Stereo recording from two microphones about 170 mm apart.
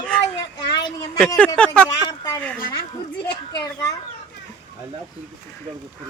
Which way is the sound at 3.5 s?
20° left (ahead or behind).